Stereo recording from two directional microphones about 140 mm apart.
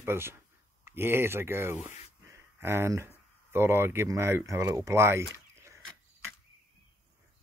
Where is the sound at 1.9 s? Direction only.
20° right (ahead or behind).